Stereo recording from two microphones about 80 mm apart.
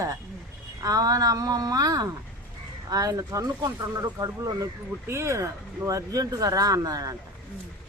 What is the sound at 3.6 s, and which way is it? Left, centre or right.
Speech, right.